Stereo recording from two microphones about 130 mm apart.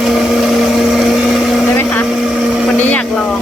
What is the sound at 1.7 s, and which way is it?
Vehicle, 15° left (ahead or behind).